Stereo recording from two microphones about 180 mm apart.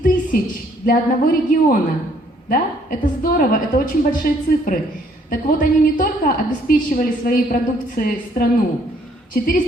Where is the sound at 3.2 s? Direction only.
55° left (ahead or behind).